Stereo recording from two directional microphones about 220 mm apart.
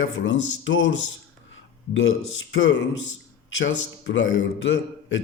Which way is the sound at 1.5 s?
60° left (ahead or behind).